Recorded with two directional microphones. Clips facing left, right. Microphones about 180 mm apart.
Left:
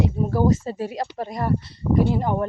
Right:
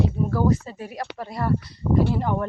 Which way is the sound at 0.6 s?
30° left (ahead or behind).